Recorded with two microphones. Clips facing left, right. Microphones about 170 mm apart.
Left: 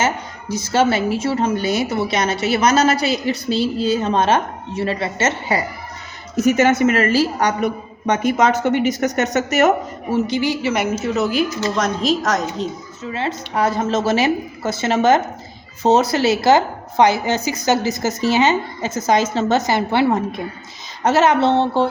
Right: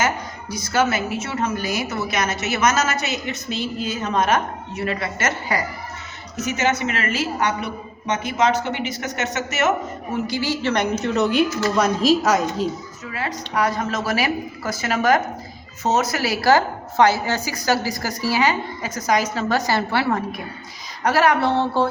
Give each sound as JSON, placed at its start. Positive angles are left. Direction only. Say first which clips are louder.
{"t": 0.0, "sound": "a woman's voice", "louder": "left 2 dB", "side_deg": 25}
{"t": 6.4, "sound": "a woman's voice", "louder": "left 8 dB", "side_deg": 50}
{"t": 10.2, "sound": "a woman's voice", "louder": "left 3 dB", "side_deg": 20}
{"t": 13.1, "sound": "a woman's voice", "louder": "left 4 dB", "side_deg": 25}